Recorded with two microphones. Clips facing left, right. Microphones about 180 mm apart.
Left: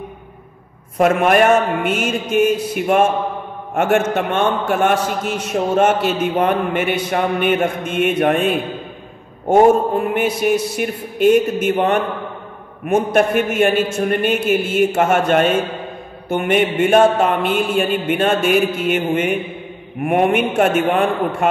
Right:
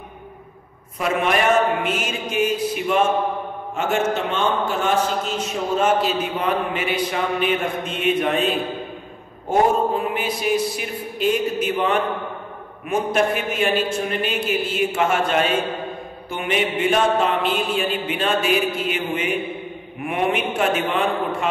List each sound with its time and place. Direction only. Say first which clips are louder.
0.9 s a man's voice: left 7 dB; 50° left (ahead or behind)
9.5 s a man's voice: left 6 dB; 45° left (ahead or behind)